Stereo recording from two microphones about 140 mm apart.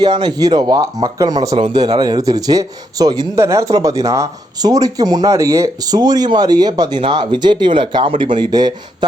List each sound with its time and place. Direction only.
0.0 s speech: 30° right (ahead or behind)